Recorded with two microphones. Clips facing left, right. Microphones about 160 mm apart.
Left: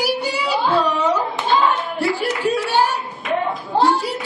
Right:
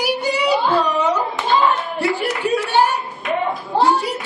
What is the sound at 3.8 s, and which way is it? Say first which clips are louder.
Clapping: even; centre (ahead or behind).